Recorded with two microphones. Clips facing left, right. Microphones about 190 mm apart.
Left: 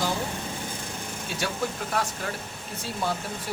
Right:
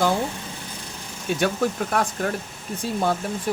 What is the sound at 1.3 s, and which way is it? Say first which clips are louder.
Speech: right 10 dB; 55° right (ahead or behind).